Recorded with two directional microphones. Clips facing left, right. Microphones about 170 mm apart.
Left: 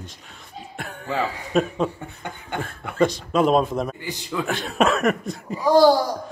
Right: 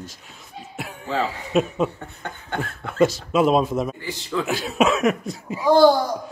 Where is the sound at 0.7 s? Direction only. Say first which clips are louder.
Right 1 dB; centre (ahead or behind).